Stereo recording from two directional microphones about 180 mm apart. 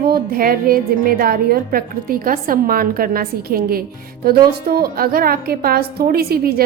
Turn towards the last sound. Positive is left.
turn(degrees=-60)  # may be behind; listen again after turning